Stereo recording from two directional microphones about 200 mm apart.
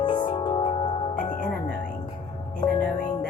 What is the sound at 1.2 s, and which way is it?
Speech, 40° left (ahead or behind).